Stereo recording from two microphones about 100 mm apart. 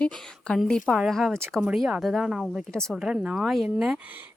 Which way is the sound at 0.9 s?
5° right (ahead or behind).